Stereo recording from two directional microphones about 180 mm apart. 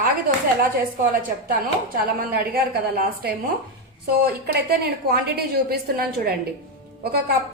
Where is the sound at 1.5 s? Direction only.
55° right (ahead or behind).